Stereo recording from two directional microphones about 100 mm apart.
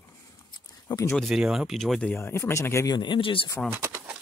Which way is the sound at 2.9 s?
55° left (ahead or behind).